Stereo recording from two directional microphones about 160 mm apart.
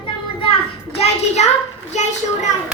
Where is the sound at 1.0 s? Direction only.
40° left (ahead or behind).